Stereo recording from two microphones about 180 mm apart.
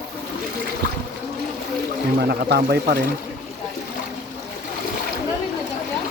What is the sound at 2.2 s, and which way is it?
Speech, 65° right (ahead or behind).